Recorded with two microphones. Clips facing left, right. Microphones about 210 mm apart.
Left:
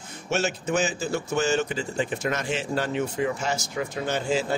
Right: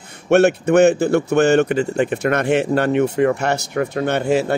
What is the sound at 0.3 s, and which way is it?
Speech, 60° right (ahead or behind).